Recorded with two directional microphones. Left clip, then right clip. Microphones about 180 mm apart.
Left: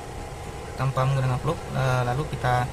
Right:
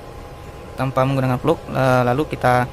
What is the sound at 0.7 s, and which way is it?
A man's voice, 55° right (ahead or behind).